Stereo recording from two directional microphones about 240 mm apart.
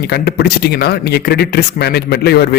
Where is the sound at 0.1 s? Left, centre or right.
Left.